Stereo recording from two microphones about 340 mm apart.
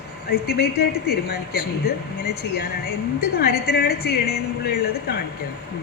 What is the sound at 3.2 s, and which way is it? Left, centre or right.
A woman's voice, left.